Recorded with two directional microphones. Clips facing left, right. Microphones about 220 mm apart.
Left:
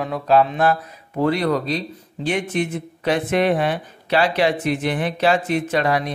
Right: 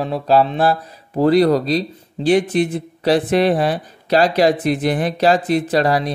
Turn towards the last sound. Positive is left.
turn(degrees=-35)  # may be behind; listen again after turning